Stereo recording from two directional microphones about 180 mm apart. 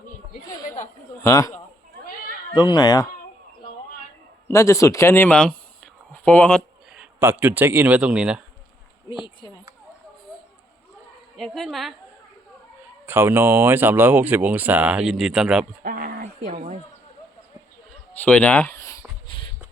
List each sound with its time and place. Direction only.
1.2 s speech: 15° left (ahead or behind)
4.4 s speech: 15° left (ahead or behind)
6.9 s speech: 10° right (ahead or behind)
11.3 s a woman's voice: centre (ahead or behind)
13.1 s speech: 10° right (ahead or behind)
15.8 s a sound: 55° right (ahead or behind)
16.2 s a sound: 45° right (ahead or behind)
18.1 s speech: 5° left (ahead or behind)
19.3 s shuffle: 25° left (ahead or behind)